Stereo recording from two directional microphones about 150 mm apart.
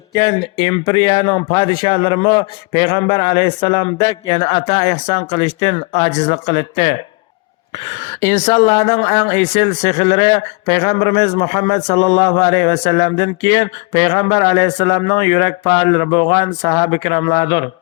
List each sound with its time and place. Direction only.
0.2 s a man's voice: 30° left (ahead or behind); by 6.4 s 45° left (ahead or behind)
6.5 s speech: 35° left (ahead or behind)
8.4 s speech: 45° left (ahead or behind)
9.0 s a man's voice: 30° left (ahead or behind)
12.2 s a man's voice: 25° left (ahead or behind)
12.6 s speech: 45° left (ahead or behind)
12.9 s a man's voice: 25° left (ahead or behind)